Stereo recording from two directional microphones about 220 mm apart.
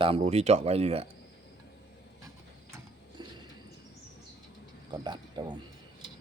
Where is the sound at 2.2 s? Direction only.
15° right (ahead or behind).